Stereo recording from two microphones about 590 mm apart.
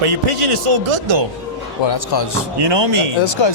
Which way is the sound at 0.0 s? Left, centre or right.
Right.